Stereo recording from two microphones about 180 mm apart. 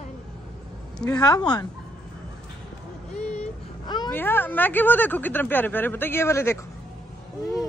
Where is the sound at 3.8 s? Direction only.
25° left (ahead or behind).